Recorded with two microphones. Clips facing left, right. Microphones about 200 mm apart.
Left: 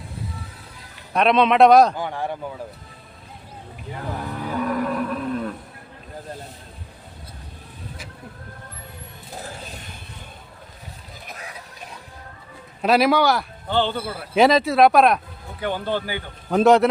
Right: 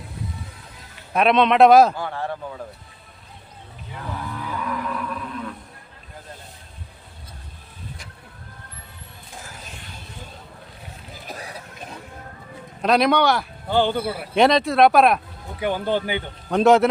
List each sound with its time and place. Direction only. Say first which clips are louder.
1.1 s a man's voice: even; centre (ahead or behind)
2.0 s speech: left 1 dB; 15° left (ahead or behind)
3.9 s cattle: left 2 dB; 45° left (ahead or behind)
12.8 s a man's voice: left 1 dB; 5° left (ahead or behind)
13.7 s speech: right 2 dB; 10° right (ahead or behind)
14.3 s a man's voice: left 1 dB; 5° left (ahead or behind)
15.6 s speech: right 2 dB; 15° right (ahead or behind)
16.5 s a man's voice: even; centre (ahead or behind)